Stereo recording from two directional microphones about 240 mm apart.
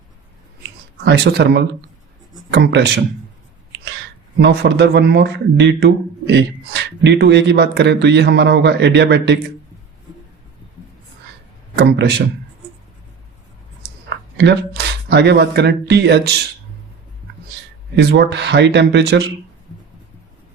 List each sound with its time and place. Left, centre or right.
1.0 s speech: right
4.4 s speech: right
11.8 s speech: right
15.1 s speech: right
17.9 s speech: right